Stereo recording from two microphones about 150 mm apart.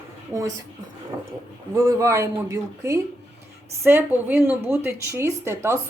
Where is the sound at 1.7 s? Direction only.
25° right (ahead or behind).